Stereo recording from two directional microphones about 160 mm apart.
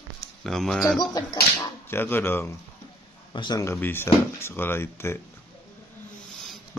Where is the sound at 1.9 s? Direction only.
15° left (ahead or behind).